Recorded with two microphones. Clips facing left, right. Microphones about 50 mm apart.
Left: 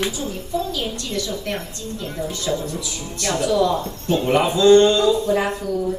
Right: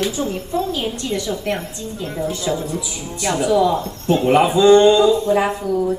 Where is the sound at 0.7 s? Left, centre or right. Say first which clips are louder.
Right 4 dB; right.